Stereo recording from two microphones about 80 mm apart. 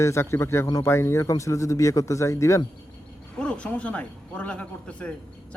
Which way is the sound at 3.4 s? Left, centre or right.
Centre.